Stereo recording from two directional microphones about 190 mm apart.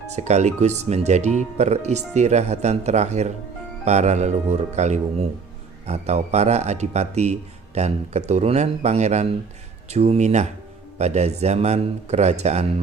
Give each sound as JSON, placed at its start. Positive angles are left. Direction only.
{"t": 0.1, "sound": "speech", "side_deg": -35}